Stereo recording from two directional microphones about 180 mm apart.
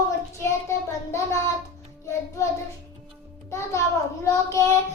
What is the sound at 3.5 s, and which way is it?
Child singing, 15° left (ahead or behind).